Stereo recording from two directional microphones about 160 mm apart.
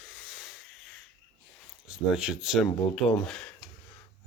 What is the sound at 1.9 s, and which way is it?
Speech, 5° right (ahead or behind).